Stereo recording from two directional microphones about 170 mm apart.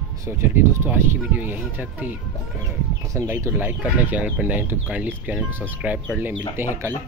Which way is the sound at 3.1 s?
15° right (ahead or behind).